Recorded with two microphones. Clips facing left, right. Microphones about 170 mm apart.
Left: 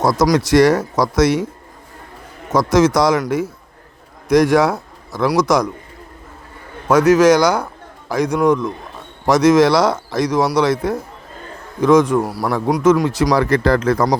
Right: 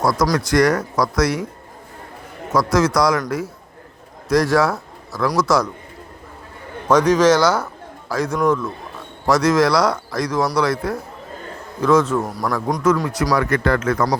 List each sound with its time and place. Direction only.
0.0 s a man's voice: 20° left (ahead or behind)
2.5 s a man's voice: 20° left (ahead or behind)
4.3 s a man's voice: 20° left (ahead or behind)
6.8 s a man's voice: 10° left (ahead or behind)
12.8 s speech: 20° left (ahead or behind)